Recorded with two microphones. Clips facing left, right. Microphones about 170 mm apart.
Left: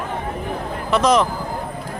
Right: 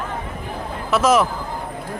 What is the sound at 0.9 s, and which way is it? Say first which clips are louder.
Speech: even; 5° right (ahead or behind).